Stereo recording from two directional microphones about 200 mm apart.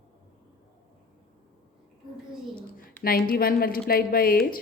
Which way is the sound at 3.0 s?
50° left (ahead or behind).